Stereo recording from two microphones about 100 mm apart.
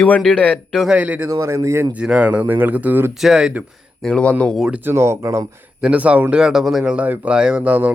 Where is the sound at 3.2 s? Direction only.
5° right (ahead or behind).